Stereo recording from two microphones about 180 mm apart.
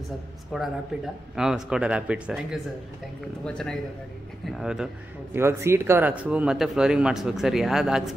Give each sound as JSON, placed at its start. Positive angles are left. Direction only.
{"t": 0.5, "sound": "speech", "side_deg": 0}
{"t": 5.3, "sound": "speech", "side_deg": -15}